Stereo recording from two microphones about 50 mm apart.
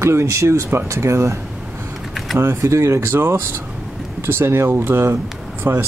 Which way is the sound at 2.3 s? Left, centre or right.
Right.